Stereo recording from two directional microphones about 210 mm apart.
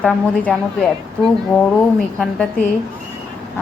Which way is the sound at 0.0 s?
5° left (ahead or behind).